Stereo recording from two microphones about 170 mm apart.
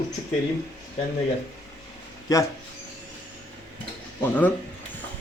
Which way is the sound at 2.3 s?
20° left (ahead or behind).